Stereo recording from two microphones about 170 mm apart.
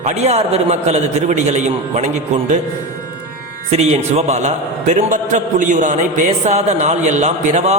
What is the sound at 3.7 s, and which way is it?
A man's voice, 40° right (ahead or behind).